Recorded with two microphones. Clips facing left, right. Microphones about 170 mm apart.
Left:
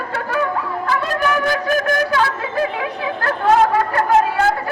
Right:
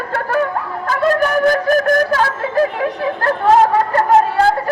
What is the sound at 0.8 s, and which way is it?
Music, 45° right (ahead or behind).